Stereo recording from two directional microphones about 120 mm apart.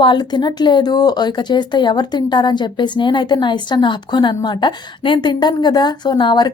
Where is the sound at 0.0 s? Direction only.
40° left (ahead or behind).